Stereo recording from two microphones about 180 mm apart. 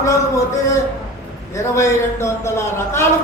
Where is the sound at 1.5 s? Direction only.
15° left (ahead or behind).